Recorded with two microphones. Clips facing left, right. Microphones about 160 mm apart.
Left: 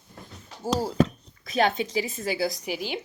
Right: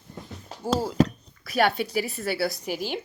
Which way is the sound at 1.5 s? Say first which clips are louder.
Right 1 dB; 20° left (ahead or behind).